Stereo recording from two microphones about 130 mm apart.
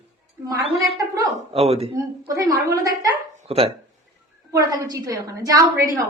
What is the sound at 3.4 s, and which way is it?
Speech, 50° right (ahead or behind).